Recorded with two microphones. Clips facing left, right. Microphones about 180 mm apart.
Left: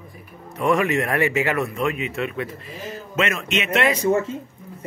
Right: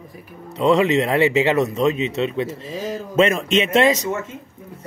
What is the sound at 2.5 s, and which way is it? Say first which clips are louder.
Speech: right 7 dB; 90° right.